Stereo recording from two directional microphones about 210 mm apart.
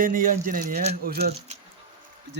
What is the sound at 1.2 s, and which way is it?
Speech, 30° right (ahead or behind).